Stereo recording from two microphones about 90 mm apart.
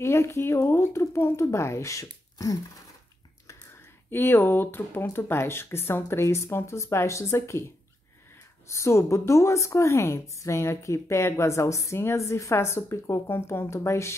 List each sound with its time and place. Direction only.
0.0 s a woman's voice: 30° left (ahead or behind)
4.1 s speech: 25° left (ahead or behind)
8.6 s a woman's voice: 30° left (ahead or behind)